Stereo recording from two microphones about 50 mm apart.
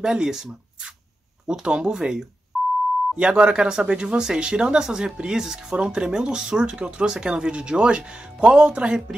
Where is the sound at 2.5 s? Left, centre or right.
Centre.